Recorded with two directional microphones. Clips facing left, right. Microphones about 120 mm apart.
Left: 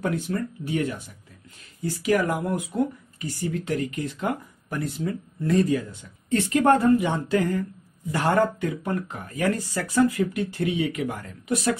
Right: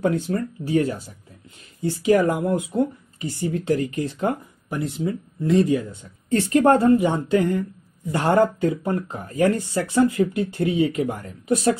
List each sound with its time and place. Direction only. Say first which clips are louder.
0.0 s speech: right 4 dB; 30° right (ahead or behind)
6.3 s speech: right 3 dB; 30° right (ahead or behind)